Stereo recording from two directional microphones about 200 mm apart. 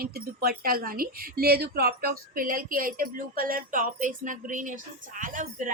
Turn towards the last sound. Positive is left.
turn(degrees=-40)  # may be behind; listen again after turning